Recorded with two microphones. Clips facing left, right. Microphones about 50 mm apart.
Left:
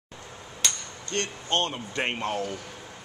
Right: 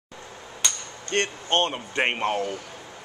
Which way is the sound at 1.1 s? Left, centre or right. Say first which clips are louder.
Right 4 dB; right.